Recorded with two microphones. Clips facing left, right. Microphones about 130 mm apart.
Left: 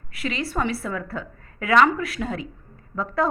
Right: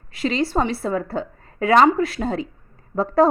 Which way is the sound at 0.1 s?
30° right (ahead or behind).